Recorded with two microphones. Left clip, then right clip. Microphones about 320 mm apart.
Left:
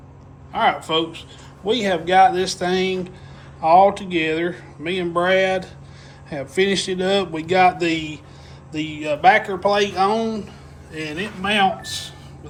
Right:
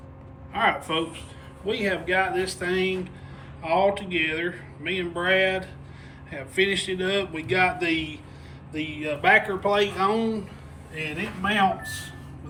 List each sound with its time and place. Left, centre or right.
0.5 s speech: centre
6.6 s speech: left
7.1 s speech: centre